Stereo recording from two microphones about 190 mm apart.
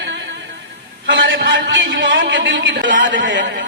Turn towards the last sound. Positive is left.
turn(degrees=-75)  # may be behind; listen again after turning